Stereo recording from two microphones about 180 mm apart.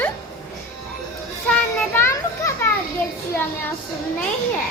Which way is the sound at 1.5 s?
5° left (ahead or behind).